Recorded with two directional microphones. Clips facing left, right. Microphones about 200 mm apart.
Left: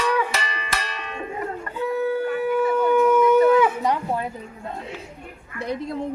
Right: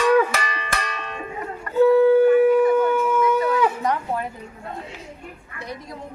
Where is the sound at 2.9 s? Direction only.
Centre (ahead or behind).